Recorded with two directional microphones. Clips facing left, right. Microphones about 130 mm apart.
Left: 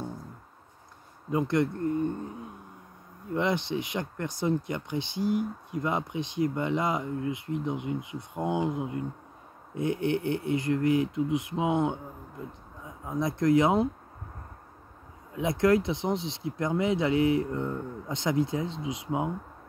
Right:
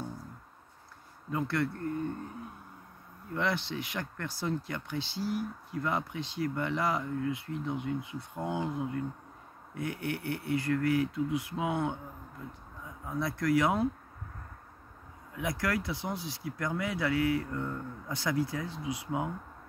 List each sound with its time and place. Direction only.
1.3 s speech: 20° left (ahead or behind)
3.3 s speech: 20° left (ahead or behind)
15.3 s speech: 25° left (ahead or behind)